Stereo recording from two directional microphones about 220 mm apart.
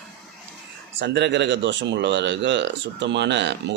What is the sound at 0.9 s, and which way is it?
Speech, 50° right (ahead or behind).